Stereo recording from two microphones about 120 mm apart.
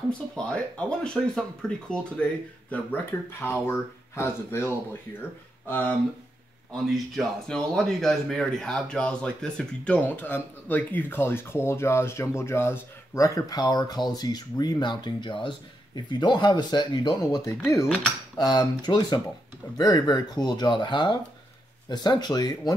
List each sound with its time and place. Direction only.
0.5 s speech: 10° left (ahead or behind)
2.7 s speech: 15° left (ahead or behind)
6.9 s speech: 5° left (ahead or behind); by 22.8 s 35° left (ahead or behind)